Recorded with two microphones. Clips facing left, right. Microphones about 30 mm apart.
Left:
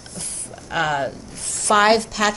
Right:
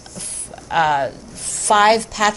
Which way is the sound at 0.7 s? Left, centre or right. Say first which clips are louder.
Right 5 dB; centre.